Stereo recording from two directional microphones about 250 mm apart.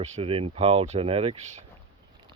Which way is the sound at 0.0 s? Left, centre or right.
Right.